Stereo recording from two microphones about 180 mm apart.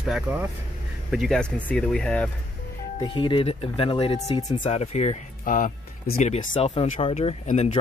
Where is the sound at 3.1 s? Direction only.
30° left (ahead or behind).